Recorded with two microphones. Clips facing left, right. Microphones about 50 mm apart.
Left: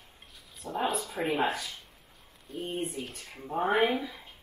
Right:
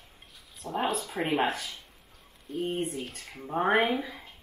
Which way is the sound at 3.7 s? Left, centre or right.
Right.